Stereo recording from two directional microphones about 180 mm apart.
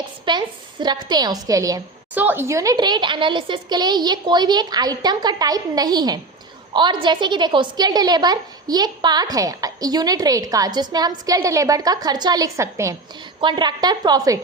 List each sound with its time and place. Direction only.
0.3 s a woman's voice: 25° right (ahead or behind)